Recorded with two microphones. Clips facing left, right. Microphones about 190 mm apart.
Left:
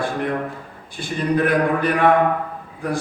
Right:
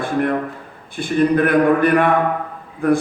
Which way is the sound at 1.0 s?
55° right (ahead or behind).